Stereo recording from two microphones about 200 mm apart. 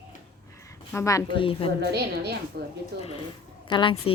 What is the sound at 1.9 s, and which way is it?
Speech, 55° right (ahead or behind).